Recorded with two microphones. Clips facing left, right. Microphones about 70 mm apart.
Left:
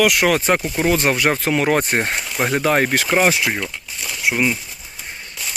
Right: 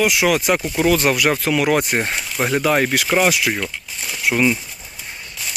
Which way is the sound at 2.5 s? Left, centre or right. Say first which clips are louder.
Even; left.